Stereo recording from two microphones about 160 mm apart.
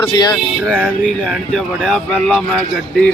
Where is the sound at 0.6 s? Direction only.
Centre (ahead or behind).